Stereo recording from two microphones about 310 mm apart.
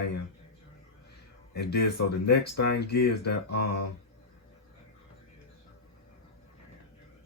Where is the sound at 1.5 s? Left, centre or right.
Left.